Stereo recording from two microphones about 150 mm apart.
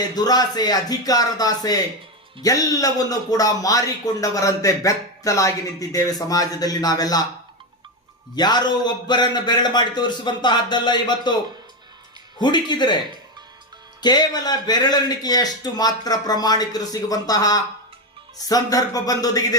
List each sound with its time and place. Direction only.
0.2 s a man's voice: 25° left (ahead or behind)
8.4 s a man's voice: 30° left (ahead or behind)
12.4 s speech: 30° left (ahead or behind)
14.0 s a man's voice: 30° left (ahead or behind)